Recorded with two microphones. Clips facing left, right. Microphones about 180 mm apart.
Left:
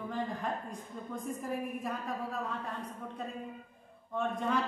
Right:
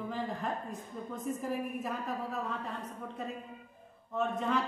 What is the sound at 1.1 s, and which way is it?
A man's voice, centre (ahead or behind).